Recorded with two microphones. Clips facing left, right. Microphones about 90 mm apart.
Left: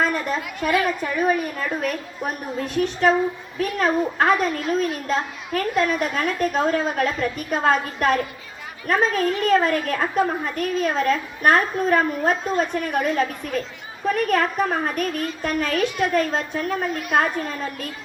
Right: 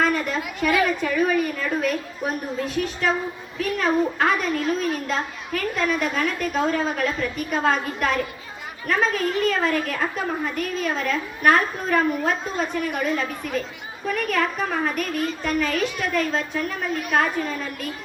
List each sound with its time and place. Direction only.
0.0 s a woman's voice: 35° left (ahead or behind)
3.0 s a woman's voice: 45° left (ahead or behind)